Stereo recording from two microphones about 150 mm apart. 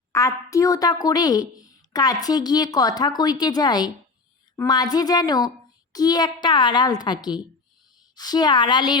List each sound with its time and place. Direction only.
0.1 s a woman's voice: 20° left (ahead or behind)